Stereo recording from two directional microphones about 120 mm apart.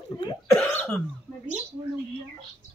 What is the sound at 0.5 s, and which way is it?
Speech, 15° left (ahead or behind).